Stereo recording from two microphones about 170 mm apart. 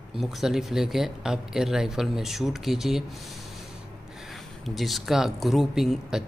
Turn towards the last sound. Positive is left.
turn(degrees=0)  # may be behind; listen again after turning